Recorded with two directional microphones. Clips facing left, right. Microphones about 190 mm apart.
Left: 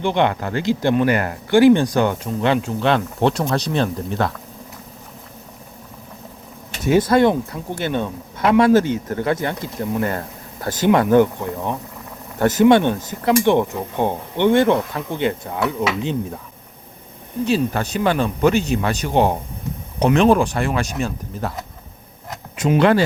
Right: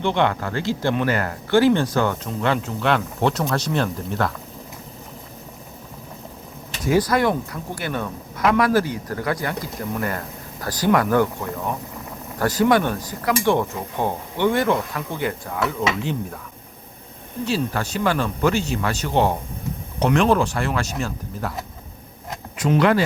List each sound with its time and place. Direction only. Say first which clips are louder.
0.0 s speech: left 2 dB; 15° left (ahead or behind)
6.8 s speech: left 4 dB; 25° left (ahead or behind)
17.4 s speech: left 4 dB; 20° left (ahead or behind)
22.8 s speech: left 3 dB; 30° left (ahead or behind)